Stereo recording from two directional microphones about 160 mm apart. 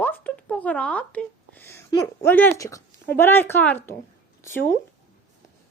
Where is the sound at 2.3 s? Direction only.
10° left (ahead or behind).